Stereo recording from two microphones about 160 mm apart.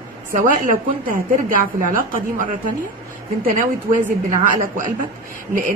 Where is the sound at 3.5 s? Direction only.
55° right (ahead or behind).